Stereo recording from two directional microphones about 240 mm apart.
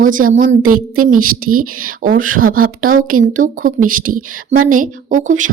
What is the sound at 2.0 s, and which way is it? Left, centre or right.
Speech, right.